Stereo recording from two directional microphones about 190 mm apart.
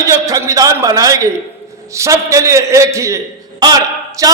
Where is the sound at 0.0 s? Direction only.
15° right (ahead or behind).